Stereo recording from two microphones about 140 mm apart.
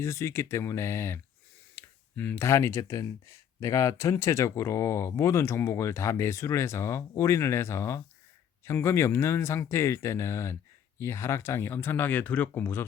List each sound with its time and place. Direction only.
0.0 s speech: 20° left (ahead or behind)